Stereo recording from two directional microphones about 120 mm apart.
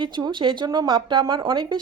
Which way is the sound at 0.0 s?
40° right (ahead or behind).